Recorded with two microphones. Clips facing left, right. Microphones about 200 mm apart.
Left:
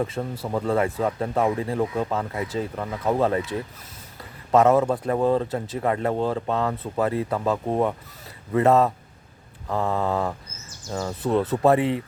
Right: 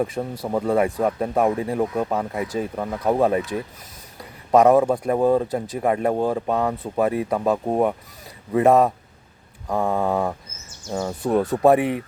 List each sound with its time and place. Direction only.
0.0 s speech: 15° right (ahead or behind)